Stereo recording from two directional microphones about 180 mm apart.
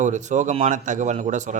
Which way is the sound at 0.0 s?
40° right (ahead or behind).